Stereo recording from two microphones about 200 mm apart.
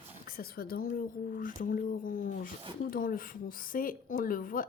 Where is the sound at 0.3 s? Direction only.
50° left (ahead or behind).